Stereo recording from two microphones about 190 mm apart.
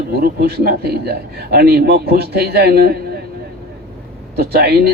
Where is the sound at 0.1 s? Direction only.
55° right (ahead or behind).